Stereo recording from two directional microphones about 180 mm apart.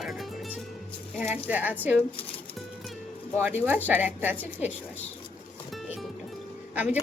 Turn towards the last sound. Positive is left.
turn(degrees=-10)  # may be behind; listen again after turning